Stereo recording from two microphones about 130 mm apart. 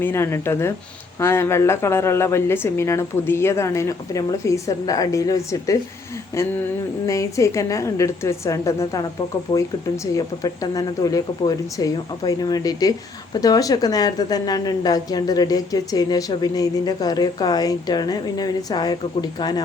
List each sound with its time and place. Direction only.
0.0 s a woman's voice: 20° left (ahead or behind)
6.3 s a sound: 20° left (ahead or behind)
7.1 s a woman's voice: 25° left (ahead or behind)